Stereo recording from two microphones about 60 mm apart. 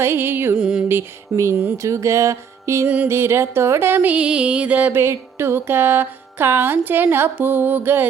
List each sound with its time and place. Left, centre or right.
0.0 s music: right
0.5 s music: centre
0.9 s music: right
1.8 s music: right
2.8 s music: right
3.1 s music: right
4.0 s music: right
4.9 s music: right